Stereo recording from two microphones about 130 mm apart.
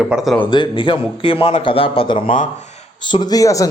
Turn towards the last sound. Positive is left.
turn(degrees=25)  # may be behind; listen again after turning